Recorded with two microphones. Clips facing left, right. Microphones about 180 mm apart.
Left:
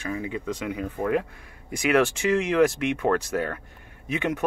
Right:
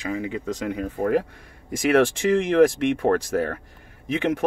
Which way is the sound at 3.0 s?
35° right (ahead or behind).